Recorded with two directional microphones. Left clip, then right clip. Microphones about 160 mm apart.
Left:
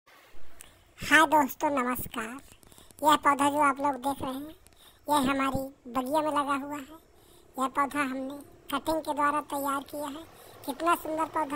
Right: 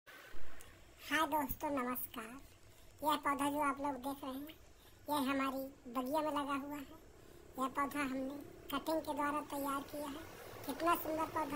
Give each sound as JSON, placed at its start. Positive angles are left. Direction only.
{"t": 0.9, "sound": "a woman's voice", "side_deg": 55}